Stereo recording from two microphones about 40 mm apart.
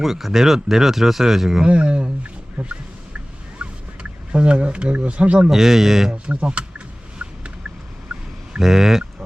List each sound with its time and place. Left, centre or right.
0.0 s speech: centre
1.6 s speech: right
3.6 s fowl: right
4.3 s speech: right
5.5 s speech: centre
6.2 s a sound: right
8.6 s speech: centre